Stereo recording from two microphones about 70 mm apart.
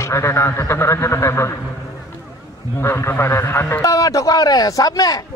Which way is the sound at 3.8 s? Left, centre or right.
Left.